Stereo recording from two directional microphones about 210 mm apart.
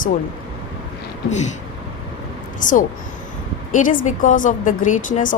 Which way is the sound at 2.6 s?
40° left (ahead or behind).